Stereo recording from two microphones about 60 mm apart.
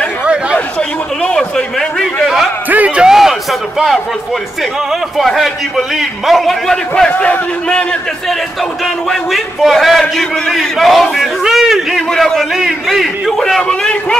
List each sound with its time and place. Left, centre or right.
0.2 s chatter: centre
0.7 s a sound: centre
2.2 s a sound: centre
2.7 s music: right
3.1 s a sound: centre
5.1 s a man's voice: centre
7.1 s a man's voice: left
9.1 s a man's voice: centre
13.6 s a man's voice: centre